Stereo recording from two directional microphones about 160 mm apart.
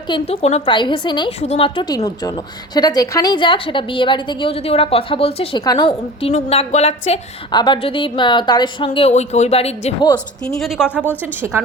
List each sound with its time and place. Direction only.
0.1 s a woman's voice: 40° left (ahead or behind)
6.3 s speech: 40° left (ahead or behind)
7.5 s a woman's voice: 30° left (ahead or behind)
10.6 s speech: centre (ahead or behind)
11.2 s a woman's voice: 15° right (ahead or behind)